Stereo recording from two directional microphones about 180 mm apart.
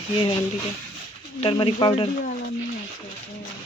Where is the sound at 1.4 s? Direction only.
30° left (ahead or behind).